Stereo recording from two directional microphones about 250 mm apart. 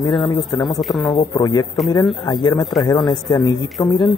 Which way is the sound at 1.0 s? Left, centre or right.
Centre.